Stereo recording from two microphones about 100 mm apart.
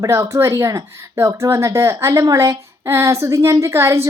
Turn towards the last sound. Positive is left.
turn(degrees=-30)  # may be behind; listen again after turning